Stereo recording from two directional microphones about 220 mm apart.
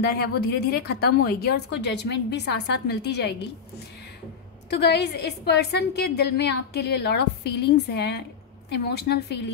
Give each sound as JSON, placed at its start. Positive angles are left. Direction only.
{"t": 0.0, "sound": "a woman's voice", "side_deg": 45}
{"t": 4.6, "sound": "a woman's voice", "side_deg": 50}